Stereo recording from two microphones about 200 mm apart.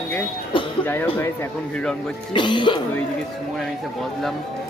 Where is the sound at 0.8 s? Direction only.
10° left (ahead or behind).